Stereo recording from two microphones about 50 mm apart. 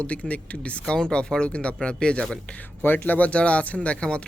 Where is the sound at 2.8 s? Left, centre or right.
Left.